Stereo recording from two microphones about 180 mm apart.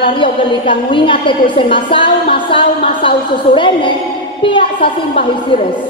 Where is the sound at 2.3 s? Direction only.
30° left (ahead or behind).